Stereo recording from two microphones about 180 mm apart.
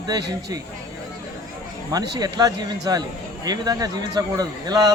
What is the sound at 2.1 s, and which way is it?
Speech, 20° right (ahead or behind).